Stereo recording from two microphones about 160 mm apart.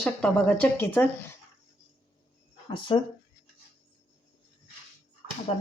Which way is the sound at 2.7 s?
30° left (ahead or behind).